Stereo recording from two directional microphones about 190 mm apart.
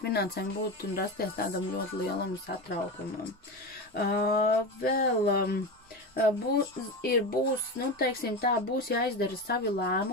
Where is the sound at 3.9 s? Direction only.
50° left (ahead or behind).